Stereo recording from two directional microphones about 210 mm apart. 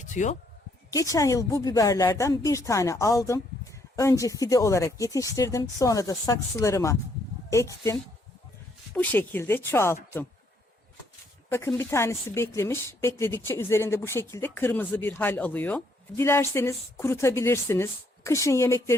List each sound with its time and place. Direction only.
0.0 s a sound: 35° left (ahead or behind)
0.9 s speech: 15° left (ahead or behind)
8.9 s speech: 10° left (ahead or behind)
11.4 s speech: 10° left (ahead or behind)